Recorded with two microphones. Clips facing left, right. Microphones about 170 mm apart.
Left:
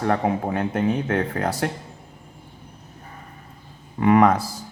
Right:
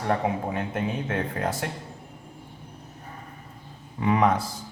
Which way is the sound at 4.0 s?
65° left (ahead or behind).